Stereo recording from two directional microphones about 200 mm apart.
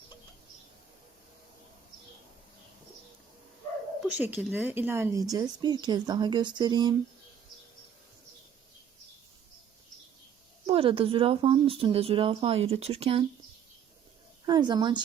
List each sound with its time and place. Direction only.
4.0 s a woman's voice: 5° right (ahead or behind)
10.7 s speech: 30° right (ahead or behind)
14.4 s speech: 20° right (ahead or behind)